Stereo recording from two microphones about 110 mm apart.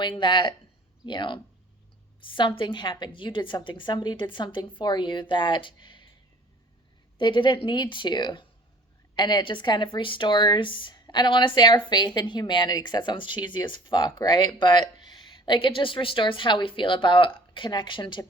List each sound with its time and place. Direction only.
0.0 s speech: 45° left (ahead or behind)
7.2 s speech: 45° left (ahead or behind)